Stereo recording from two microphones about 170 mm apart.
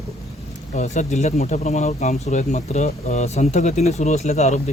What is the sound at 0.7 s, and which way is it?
Speech, 45° left (ahead or behind).